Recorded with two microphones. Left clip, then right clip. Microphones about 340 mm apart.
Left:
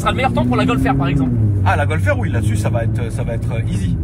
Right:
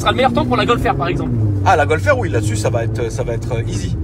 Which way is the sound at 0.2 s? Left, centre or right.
Right.